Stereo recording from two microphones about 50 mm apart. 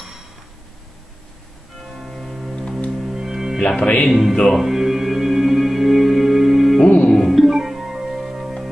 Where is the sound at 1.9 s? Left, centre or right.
Centre.